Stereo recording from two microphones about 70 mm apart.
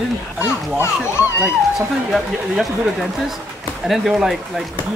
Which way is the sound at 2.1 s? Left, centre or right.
Centre.